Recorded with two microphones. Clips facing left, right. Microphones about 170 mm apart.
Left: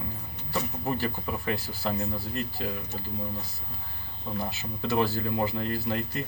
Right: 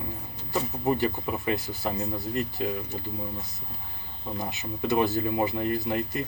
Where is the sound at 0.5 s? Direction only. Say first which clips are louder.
Right 4 dB; 20° right (ahead or behind).